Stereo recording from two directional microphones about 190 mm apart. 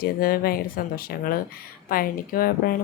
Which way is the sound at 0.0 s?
50° left (ahead or behind).